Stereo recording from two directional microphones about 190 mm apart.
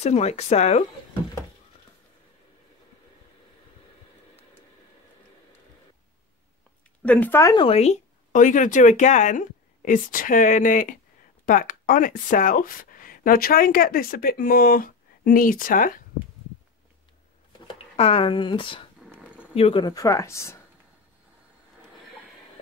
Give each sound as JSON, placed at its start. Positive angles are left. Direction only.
{"t": 0.0, "sound": "speech", "side_deg": 35}
{"t": 7.0, "sound": "speech", "side_deg": 10}
{"t": 7.5, "sound": "speech", "side_deg": 30}
{"t": 17.5, "sound": "a sound", "side_deg": 30}
{"t": 19.5, "sound": "speech", "side_deg": 30}